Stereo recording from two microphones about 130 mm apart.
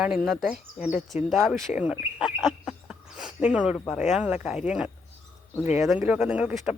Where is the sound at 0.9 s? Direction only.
70° left (ahead or behind).